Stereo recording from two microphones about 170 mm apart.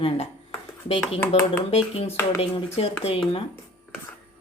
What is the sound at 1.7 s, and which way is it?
Speech, 35° left (ahead or behind).